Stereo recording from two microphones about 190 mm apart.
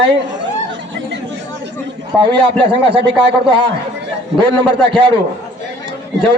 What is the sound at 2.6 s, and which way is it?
Speech, 30° right (ahead or behind).